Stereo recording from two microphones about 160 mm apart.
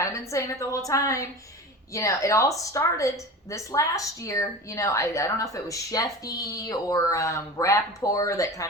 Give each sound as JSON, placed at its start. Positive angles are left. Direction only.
{"t": 0.0, "sound": "a woman's voice", "side_deg": 20}